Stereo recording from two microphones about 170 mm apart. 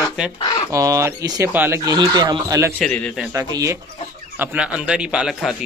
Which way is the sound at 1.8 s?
20° right (ahead or behind).